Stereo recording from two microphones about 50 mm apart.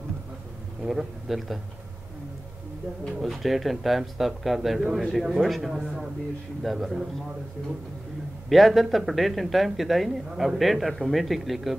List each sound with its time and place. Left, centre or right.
0.8 s speech: centre
3.2 s speech: centre
8.5 s speech: centre